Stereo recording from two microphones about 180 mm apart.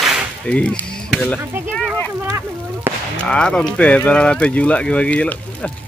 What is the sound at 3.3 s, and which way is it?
Speech, 5° left (ahead or behind).